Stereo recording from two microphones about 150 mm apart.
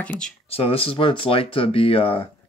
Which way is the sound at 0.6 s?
40° left (ahead or behind).